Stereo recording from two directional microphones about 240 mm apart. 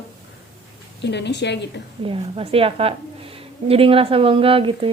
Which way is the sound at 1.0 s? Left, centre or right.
Left.